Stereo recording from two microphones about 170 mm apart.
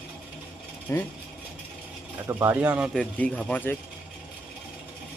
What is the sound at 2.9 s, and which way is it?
Speech, 5° left (ahead or behind).